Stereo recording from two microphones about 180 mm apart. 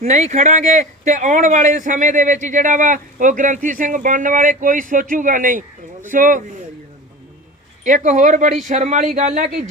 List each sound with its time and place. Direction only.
0.0 s a man's voice: 40° right (ahead or behind)
7.9 s speech: 45° right (ahead or behind)